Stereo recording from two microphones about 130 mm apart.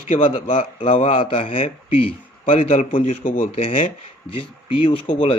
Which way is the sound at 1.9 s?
45° left (ahead or behind).